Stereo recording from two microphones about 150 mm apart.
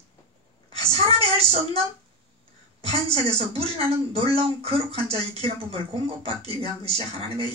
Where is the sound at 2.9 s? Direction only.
40° right (ahead or behind).